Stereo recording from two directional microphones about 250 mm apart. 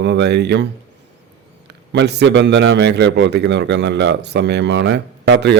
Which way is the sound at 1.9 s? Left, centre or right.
Right.